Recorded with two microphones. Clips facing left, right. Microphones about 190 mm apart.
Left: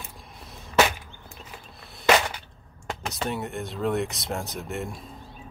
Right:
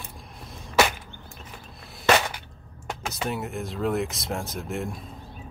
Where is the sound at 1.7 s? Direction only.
Centre (ahead or behind).